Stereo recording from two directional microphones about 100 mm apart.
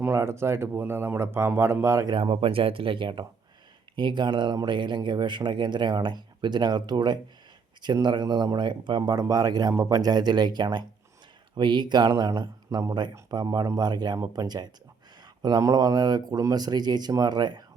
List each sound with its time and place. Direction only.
0.1 s speech: 25° right (ahead or behind)
2.0 s speech: 55° right (ahead or behind)